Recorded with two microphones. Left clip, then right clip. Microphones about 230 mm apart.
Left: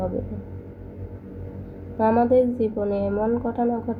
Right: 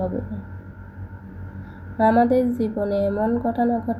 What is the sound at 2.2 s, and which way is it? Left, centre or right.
A woman's voice, right.